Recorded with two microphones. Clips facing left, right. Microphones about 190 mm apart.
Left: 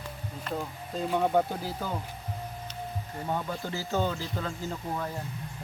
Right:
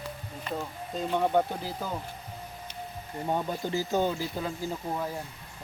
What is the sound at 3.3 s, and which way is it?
Speech, 20° right (ahead or behind).